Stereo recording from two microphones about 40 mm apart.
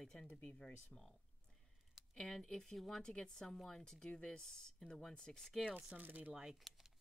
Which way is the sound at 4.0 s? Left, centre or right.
Left.